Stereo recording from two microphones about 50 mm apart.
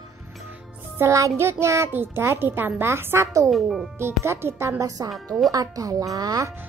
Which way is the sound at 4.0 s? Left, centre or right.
Right.